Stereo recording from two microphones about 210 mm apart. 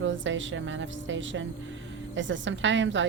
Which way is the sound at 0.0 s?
60° right (ahead or behind).